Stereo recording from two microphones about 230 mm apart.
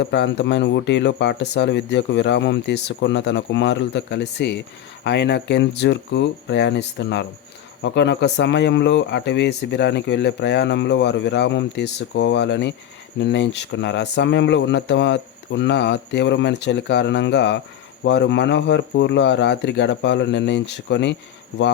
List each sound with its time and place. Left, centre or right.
0.0 s speech: left